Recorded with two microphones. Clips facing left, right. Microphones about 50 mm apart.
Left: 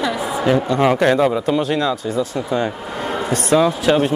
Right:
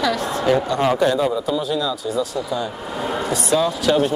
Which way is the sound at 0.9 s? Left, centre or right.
Left.